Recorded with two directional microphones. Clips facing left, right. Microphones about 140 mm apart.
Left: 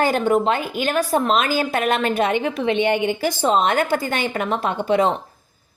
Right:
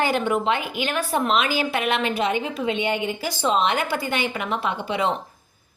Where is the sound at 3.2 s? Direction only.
45° left (ahead or behind).